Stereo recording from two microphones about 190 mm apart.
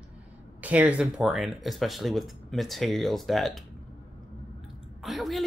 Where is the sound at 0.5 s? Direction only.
10° right (ahead or behind).